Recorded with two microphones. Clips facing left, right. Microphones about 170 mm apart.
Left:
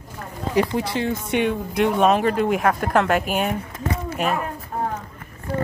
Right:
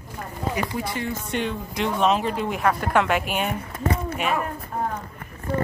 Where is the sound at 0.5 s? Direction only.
80° left; by 3.4 s 45° left (ahead or behind).